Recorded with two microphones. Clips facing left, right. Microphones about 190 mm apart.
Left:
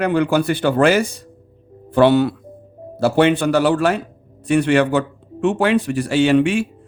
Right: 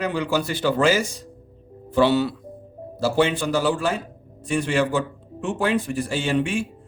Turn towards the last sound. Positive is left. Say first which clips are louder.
# left 8 dB
turn(degrees=70)  # may be behind; listen again after turning